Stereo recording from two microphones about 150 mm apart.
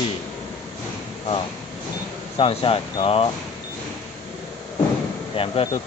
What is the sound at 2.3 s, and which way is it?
Speech, 40° left (ahead or behind).